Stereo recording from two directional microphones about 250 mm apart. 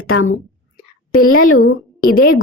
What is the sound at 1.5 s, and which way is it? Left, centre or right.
Speech, left.